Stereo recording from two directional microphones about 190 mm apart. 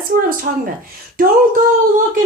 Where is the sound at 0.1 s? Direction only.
50° right (ahead or behind).